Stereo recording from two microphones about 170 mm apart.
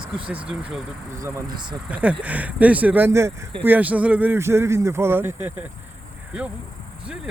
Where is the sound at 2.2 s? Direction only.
10° right (ahead or behind).